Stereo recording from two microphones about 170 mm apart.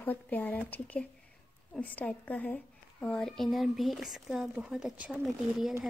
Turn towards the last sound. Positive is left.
turn(degrees=0)  # may be behind; listen again after turning